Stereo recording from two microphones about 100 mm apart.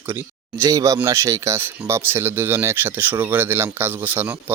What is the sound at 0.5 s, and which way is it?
Speech, 30° right (ahead or behind).